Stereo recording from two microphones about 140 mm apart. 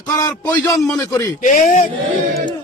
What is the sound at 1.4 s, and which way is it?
Speech, 65° left (ahead or behind).